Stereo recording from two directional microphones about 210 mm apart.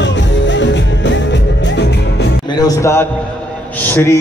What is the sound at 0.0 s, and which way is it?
Music, 60° left (ahead or behind).